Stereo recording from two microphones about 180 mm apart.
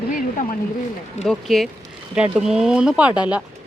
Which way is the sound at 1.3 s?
Centre (ahead or behind).